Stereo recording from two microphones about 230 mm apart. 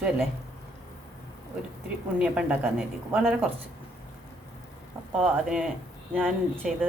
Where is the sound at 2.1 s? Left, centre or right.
Centre.